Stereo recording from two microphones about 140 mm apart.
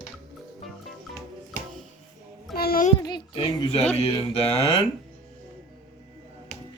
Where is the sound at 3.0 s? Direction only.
35° left (ahead or behind).